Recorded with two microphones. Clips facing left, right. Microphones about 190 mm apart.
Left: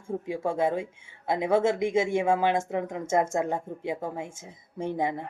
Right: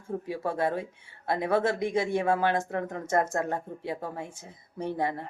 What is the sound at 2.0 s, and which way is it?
Speech, 10° left (ahead or behind).